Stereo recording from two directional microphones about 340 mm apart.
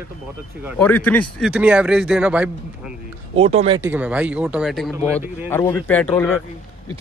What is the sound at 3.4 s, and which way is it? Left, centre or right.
Speech, centre.